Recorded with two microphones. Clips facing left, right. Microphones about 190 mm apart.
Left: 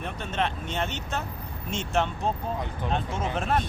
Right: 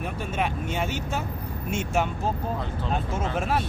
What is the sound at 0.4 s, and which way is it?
Speech, 10° right (ahead or behind).